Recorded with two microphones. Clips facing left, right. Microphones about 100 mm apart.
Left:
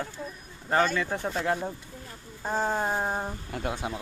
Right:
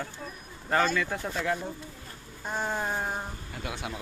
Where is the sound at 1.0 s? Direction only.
30° left (ahead or behind).